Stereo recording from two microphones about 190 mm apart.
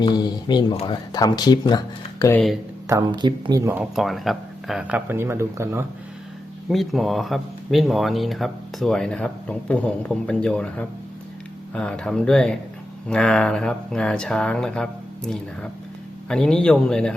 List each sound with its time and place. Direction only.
0.0 s speech: 20° left (ahead or behind)
2.8 s speech: 20° right (ahead or behind)
3.9 s speech: centre (ahead or behind)
6.7 s speech: centre (ahead or behind)